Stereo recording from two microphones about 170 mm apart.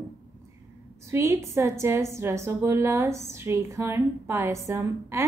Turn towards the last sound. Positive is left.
turn(degrees=-15)  # may be behind; listen again after turning